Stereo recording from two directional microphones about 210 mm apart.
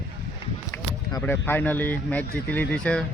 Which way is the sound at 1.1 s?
10° left (ahead or behind).